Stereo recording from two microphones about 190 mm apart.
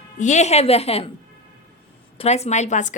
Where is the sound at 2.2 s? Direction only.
35° left (ahead or behind).